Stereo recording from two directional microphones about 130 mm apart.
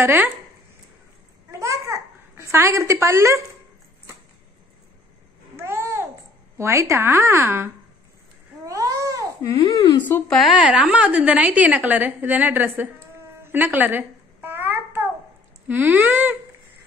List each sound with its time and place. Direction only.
0.0 s a woman's voice: 15° right (ahead or behind)
1.5 s babbling: 25° right (ahead or behind)
5.6 s babbling: 20° right (ahead or behind)
6.6 s a woman's voice: 20° right (ahead or behind)
8.6 s babbling: 25° right (ahead or behind)
9.4 s speech: 25° left (ahead or behind)
10.3 s a woman's voice: centre (ahead or behind)
13.4 s babbling: 15° right (ahead or behind)
15.7 s a woman's voice: 15° right (ahead or behind)